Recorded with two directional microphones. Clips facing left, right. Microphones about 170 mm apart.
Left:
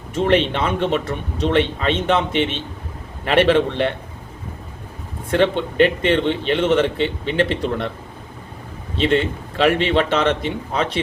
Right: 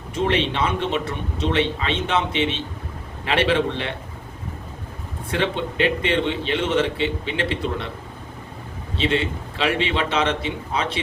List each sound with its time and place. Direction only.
0.1 s a man's voice: 50° left (ahead or behind)
5.3 s a man's voice: 50° left (ahead or behind)
9.0 s a man's voice: 50° left (ahead or behind)